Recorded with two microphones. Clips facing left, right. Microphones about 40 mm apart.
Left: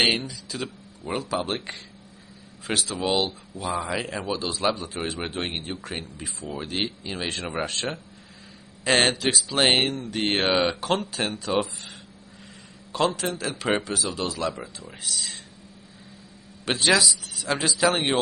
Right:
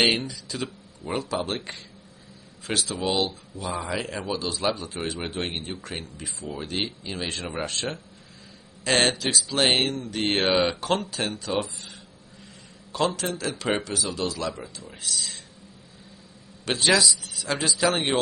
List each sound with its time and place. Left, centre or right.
0.3 s a man's voice: centre
12.9 s a man's voice: centre
16.6 s a man's voice: centre